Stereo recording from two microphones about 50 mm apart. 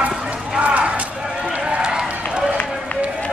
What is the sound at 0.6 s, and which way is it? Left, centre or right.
Run, right.